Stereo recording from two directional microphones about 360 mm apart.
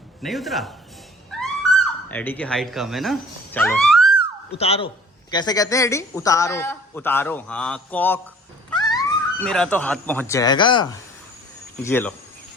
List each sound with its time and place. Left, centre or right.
0.2 s speech: centre
1.3 s a sound: centre
4.5 s a woman's voice: centre